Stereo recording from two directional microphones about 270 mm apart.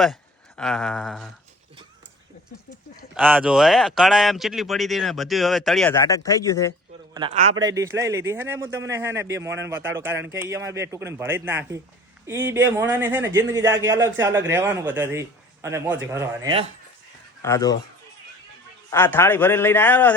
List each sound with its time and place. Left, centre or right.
0.0 s speech: centre
3.2 s speech: centre
5.9 s a man's voice: centre
7.1 s a man's voice: centre
17.4 s a man's voice: centre
18.9 s a man's voice: centre